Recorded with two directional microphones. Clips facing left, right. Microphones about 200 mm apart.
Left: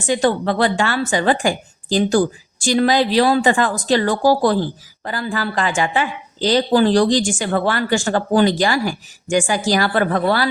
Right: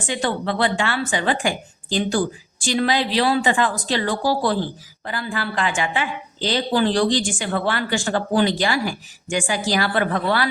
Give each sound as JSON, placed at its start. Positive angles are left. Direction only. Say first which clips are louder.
{"t": 0.1, "sound": "a woman's voice", "louder": "left 6 dB", "side_deg": 40}